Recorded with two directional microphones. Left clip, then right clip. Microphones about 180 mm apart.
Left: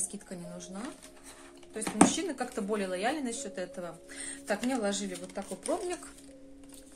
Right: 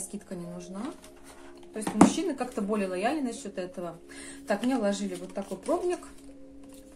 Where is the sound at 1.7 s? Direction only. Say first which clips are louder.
Right 3 dB; 15° left (ahead or behind).